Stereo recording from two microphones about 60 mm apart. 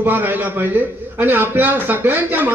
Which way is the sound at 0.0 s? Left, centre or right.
Right.